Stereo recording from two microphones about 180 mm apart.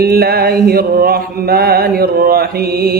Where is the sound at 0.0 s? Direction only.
60° right (ahead or behind).